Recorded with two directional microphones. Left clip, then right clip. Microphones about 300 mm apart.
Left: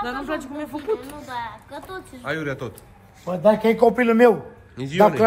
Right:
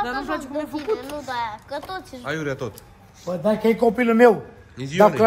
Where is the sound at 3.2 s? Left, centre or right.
Left.